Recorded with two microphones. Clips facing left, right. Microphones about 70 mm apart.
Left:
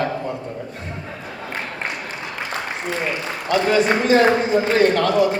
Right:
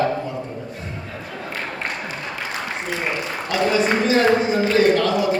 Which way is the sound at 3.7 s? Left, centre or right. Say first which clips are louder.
Left 3 dB; left.